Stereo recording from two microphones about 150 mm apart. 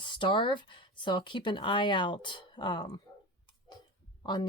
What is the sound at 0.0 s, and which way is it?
Speech, 30° left (ahead or behind).